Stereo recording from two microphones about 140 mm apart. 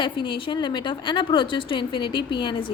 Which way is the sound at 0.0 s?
35° left (ahead or behind).